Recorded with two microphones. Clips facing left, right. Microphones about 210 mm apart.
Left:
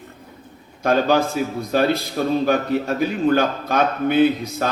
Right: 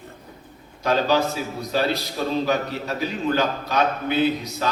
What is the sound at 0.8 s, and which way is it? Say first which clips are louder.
A man's voice: left 3 dB; 50° left (ahead or behind).